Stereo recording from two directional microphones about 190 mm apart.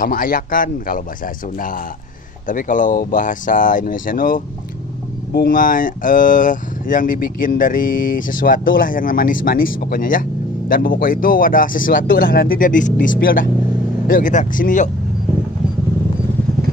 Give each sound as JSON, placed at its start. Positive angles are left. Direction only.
{"t": 0.0, "sound": "speech", "side_deg": 50}
{"t": 2.4, "sound": "speech", "side_deg": 45}